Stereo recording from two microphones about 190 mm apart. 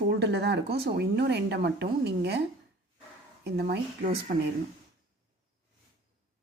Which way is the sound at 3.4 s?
60° right (ahead or behind).